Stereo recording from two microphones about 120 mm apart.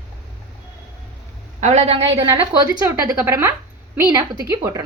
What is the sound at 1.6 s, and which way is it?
Speech, 70° right (ahead or behind).